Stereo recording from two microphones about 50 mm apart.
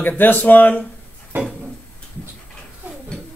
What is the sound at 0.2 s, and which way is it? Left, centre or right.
Speech, left.